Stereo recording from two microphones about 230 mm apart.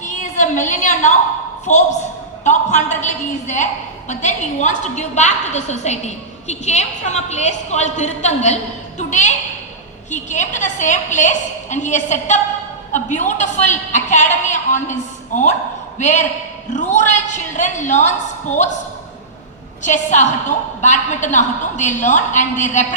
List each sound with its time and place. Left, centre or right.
0.0 s a sound: left
1.7 s a woman's voice: left
19.8 s a woman's voice: left